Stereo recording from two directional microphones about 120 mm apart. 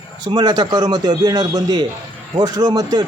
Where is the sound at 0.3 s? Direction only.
35° right (ahead or behind).